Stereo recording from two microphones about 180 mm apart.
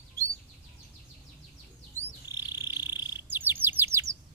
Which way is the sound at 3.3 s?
10° right (ahead or behind).